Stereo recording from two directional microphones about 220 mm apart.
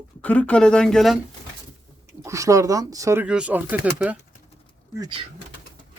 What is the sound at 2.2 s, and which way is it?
Speech, 15° right (ahead or behind).